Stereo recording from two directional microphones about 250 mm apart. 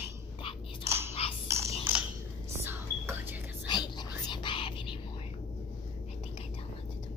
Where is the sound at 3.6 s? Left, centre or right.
Centre.